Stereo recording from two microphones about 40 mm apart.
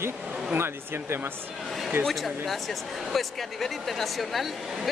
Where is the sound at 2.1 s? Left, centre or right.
Centre.